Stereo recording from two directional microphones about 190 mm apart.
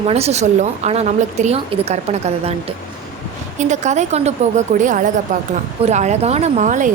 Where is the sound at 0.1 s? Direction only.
35° right (ahead or behind).